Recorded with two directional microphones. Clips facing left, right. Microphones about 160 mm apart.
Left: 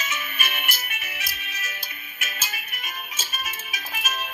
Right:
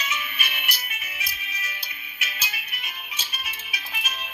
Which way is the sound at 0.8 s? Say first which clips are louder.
Left 2 dB; 70° left (ahead or behind).